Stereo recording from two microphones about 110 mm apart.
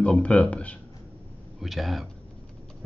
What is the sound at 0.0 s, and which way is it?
Speech, 10° left (ahead or behind).